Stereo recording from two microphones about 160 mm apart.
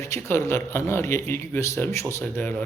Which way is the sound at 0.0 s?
15° left (ahead or behind).